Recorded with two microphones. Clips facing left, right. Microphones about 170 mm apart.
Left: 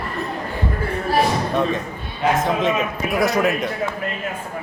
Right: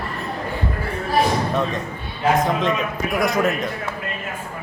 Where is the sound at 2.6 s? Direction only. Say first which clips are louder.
Left 1 dB; centre (ahead or behind).